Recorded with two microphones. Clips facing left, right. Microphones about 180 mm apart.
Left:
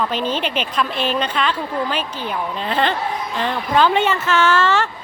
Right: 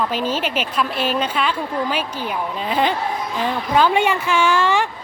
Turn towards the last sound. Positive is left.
turn(degrees=-15)  # may be behind; listen again after turning